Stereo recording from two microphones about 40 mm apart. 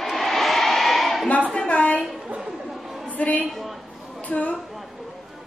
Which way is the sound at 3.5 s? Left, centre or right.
Centre.